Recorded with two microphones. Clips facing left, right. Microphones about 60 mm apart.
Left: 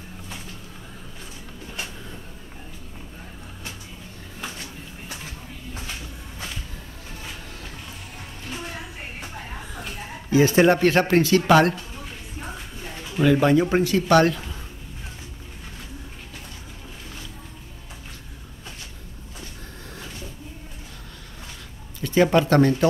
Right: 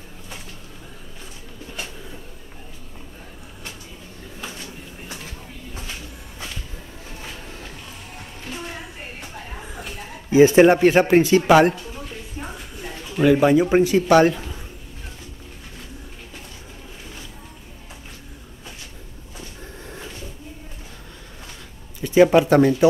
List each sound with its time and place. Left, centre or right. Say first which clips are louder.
10.3 s speech: right 5 dB; right
13.1 s speech: right 2 dB; centre
22.0 s speech: right 4 dB; centre